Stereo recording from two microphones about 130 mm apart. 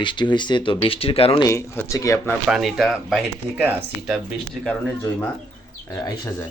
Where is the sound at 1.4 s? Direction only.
20° left (ahead or behind).